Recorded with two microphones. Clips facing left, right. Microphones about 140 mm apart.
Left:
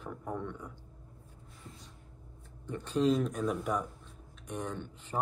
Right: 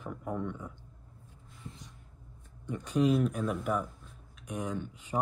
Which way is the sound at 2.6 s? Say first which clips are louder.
Right 1 dB; 10° right (ahead or behind).